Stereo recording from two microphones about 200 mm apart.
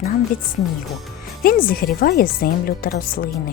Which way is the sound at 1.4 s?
45° left (ahead or behind).